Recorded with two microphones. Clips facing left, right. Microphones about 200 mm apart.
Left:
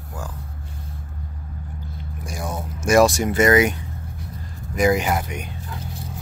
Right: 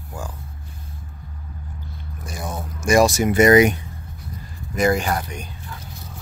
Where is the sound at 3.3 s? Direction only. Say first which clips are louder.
Right 3 dB; 15° right (ahead or behind).